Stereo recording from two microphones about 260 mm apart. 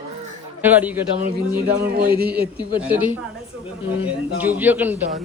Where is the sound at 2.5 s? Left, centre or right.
Centre.